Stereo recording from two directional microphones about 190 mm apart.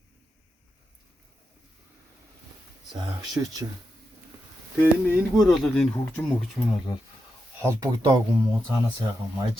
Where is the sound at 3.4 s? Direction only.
15° right (ahead or behind).